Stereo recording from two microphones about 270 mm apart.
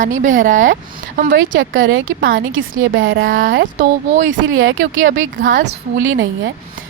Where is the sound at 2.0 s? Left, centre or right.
Right.